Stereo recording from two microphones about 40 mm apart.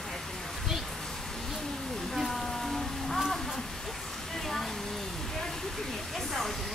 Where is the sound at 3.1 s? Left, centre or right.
Centre.